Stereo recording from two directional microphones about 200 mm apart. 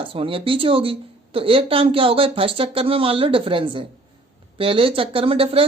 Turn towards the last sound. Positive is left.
turn(degrees=-30)  # may be behind; listen again after turning